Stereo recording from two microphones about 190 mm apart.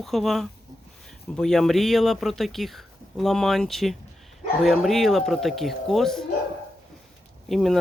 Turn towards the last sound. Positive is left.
turn(degrees=0)  # may be behind; listen again after turning